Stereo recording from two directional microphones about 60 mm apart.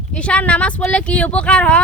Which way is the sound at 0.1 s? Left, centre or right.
Centre.